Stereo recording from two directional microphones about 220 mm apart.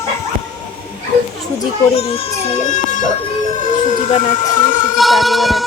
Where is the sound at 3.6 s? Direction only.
35° left (ahead or behind).